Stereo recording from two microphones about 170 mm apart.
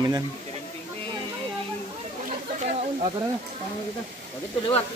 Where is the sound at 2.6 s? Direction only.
40° right (ahead or behind).